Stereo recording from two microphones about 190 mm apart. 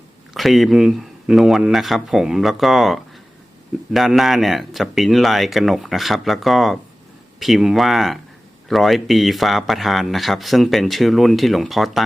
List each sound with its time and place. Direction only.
0.3 s speech: centre (ahead or behind)